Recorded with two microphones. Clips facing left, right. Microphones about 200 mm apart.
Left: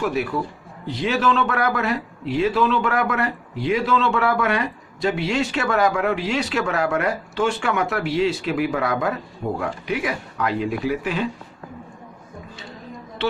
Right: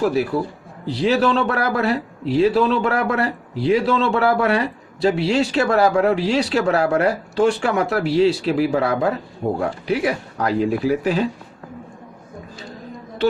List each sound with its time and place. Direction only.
0.0 s a man's voice: 35° right (ahead or behind)